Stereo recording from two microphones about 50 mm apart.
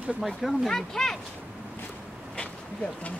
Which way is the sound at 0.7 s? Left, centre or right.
Centre.